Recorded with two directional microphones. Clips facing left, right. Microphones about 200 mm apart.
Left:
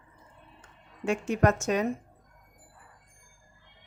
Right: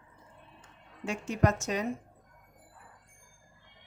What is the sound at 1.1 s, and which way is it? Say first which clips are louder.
Speech: left 4 dB; 55° left (ahead or behind).